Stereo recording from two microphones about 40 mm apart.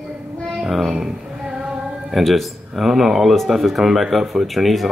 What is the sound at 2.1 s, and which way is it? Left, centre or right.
Speech, centre.